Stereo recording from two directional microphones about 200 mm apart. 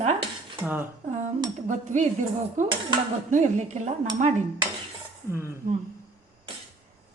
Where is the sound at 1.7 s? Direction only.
40° right (ahead or behind).